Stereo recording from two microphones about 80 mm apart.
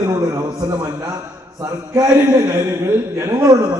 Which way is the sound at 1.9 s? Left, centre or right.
Right.